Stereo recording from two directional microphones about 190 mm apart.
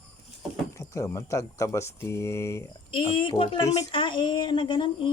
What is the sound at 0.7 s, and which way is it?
Speech, 15° left (ahead or behind).